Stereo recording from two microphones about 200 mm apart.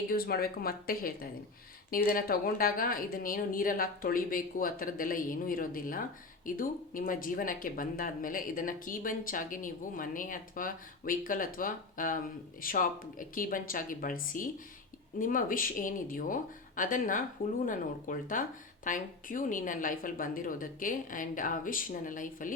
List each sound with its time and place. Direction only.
0.1 s a woman's voice: 50° left (ahead or behind)